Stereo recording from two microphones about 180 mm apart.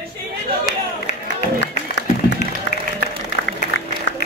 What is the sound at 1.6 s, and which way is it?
Music, 80° left.